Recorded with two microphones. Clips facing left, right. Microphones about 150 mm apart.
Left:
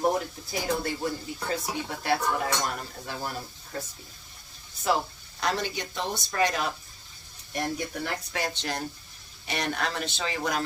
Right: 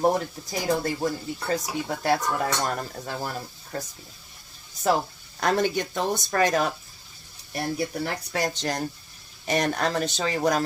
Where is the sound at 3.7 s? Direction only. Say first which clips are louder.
Right 3 dB; 40° right (ahead or behind).